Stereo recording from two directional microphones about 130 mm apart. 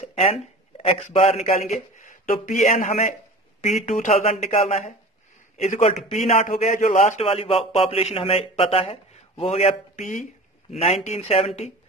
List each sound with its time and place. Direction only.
0.0 s a sound: 55° left (ahead or behind)
0.7 s speech: 50° left (ahead or behind); by 3.2 s 80° left
3.6 s speech: 65° left (ahead or behind)
6.3 s a man's voice: 70° left (ahead or behind)
10.7 s speech: 55° left (ahead or behind)